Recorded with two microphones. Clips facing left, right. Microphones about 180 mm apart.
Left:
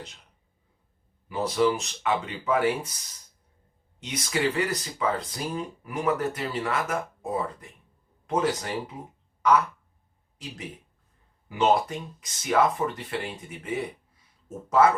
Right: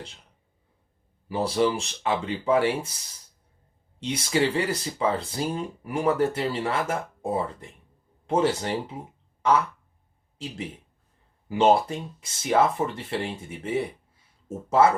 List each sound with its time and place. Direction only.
1.3 s speech: 30° right (ahead or behind)
4.0 s speech: 30° right (ahead or behind)